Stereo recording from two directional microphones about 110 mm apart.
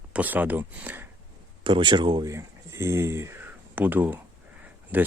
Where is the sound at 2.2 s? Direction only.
25° right (ahead or behind).